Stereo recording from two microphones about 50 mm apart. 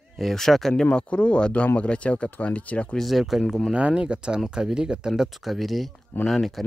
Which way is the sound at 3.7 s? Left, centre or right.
Right.